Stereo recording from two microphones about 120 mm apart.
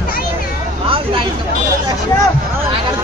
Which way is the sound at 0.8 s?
50° right (ahead or behind).